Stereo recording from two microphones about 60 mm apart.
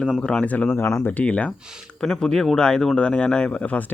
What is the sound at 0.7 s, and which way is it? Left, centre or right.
Speech, left.